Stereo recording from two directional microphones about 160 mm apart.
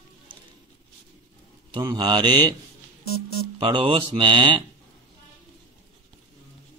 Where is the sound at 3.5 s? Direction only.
35° right (ahead or behind).